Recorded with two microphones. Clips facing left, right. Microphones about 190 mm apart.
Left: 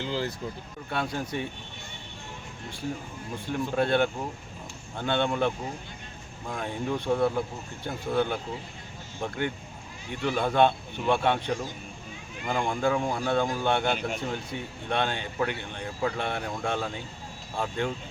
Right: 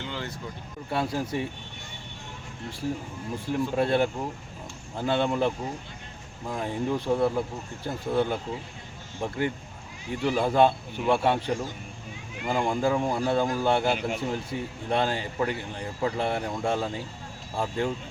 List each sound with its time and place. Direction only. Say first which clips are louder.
0.0 s speech: left 5 dB; 35° left (ahead or behind)
0.9 s a man's voice: right 3 dB; centre (ahead or behind)
3.3 s a man's voice: right 1 dB; centre (ahead or behind)
10.1 s a man's voice: right 2 dB; 5° right (ahead or behind)